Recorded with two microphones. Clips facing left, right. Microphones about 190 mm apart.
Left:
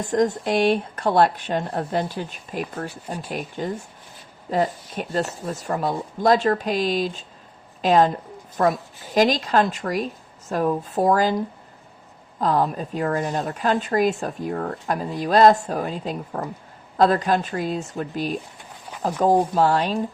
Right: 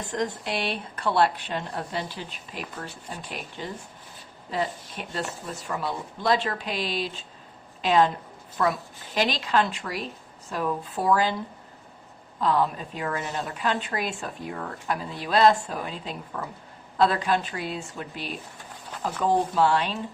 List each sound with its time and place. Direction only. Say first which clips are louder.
0.0 s a woman's voice: left 8 dB; 45° left (ahead or behind)